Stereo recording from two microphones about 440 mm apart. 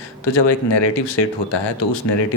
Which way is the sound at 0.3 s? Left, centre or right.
Left.